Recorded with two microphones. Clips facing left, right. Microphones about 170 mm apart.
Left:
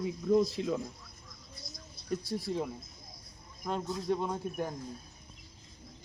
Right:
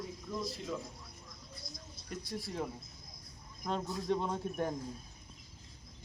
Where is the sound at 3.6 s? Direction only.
5° left (ahead or behind).